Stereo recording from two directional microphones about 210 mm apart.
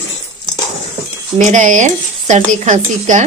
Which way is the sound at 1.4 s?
35° right (ahead or behind).